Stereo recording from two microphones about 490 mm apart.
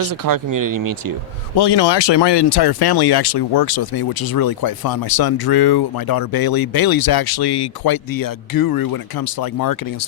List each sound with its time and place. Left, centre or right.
0.1 s speech: right
1.5 s speech: left